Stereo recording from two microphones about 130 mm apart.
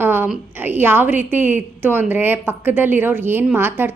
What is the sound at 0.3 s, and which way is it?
A woman's voice, 15° right (ahead or behind).